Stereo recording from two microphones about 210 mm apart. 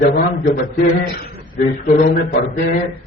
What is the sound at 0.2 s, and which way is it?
Speech, 40° left (ahead or behind).